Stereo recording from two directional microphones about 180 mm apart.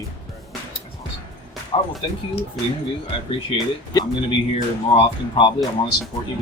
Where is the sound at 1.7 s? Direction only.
30° left (ahead or behind).